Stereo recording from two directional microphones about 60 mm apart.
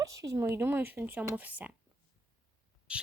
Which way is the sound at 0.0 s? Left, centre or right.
Right.